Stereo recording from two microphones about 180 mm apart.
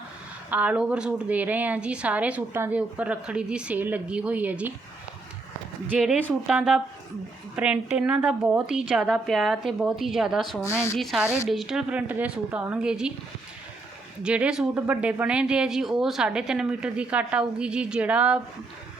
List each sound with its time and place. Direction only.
0.5 s a woman's voice: 10° right (ahead or behind)
5.9 s a woman's voice: 5° right (ahead or behind)
10.6 s a woman's voice: 15° left (ahead or behind)
10.9 s speech: centre (ahead or behind)
14.2 s speech: 5° right (ahead or behind)